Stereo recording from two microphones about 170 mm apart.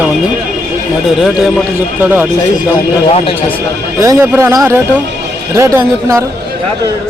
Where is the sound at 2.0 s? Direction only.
10° right (ahead or behind).